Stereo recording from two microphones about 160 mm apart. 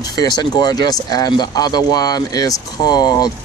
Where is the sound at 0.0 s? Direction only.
25° left (ahead or behind).